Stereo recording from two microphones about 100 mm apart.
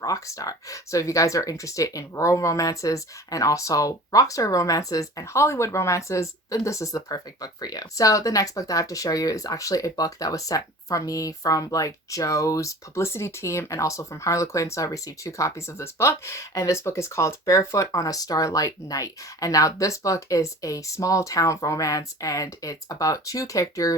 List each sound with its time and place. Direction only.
0.0 s speech: 35° left (ahead or behind)